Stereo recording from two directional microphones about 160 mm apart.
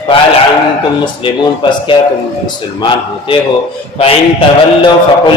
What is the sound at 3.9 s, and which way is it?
Mantra, 35° left (ahead or behind).